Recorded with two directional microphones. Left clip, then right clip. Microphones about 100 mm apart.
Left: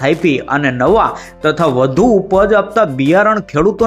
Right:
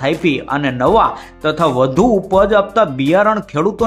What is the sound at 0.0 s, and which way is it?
Speech, 25° left (ahead or behind).